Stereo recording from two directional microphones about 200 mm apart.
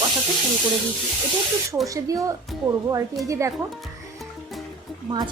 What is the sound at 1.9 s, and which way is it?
A woman's voice, 15° right (ahead or behind).